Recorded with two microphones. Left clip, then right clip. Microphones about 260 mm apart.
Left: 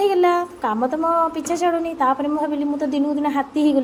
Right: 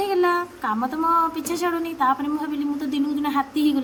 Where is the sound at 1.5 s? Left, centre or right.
Centre.